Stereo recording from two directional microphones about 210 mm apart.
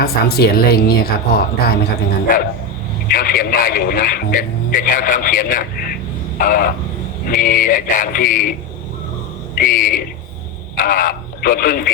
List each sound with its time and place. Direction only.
0.0 s a man's voice: 50° left (ahead or behind)
9.6 s speech: 40° left (ahead or behind)